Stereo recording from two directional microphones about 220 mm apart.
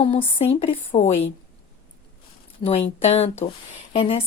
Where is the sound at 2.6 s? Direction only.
25° left (ahead or behind).